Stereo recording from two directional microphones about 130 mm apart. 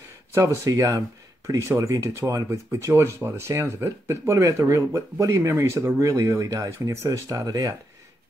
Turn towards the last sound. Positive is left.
turn(degrees=-25)  # may be behind; listen again after turning